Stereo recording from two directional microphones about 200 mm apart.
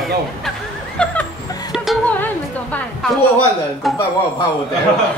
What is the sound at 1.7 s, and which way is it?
Music, centre (ahead or behind).